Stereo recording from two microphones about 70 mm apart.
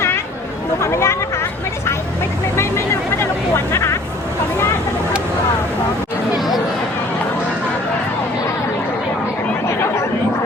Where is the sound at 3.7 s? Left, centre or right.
Left.